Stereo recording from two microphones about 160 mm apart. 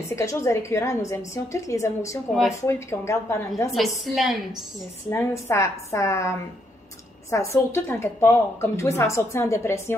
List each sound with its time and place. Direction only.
0.1 s a woman's voice: 20° left (ahead or behind)
3.7 s a woman's voice: centre (ahead or behind)
5.1 s a woman's voice: 15° left (ahead or behind)